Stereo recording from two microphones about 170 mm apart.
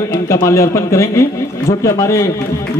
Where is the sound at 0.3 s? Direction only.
15° left (ahead or behind).